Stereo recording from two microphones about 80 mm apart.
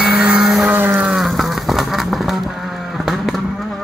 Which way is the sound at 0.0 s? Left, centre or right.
Centre.